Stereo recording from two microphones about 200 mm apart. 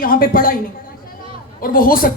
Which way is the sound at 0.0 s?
45° left (ahead or behind).